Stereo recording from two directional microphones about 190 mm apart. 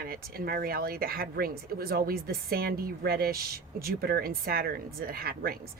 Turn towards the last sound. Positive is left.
turn(degrees=-50)  # may be behind; listen again after turning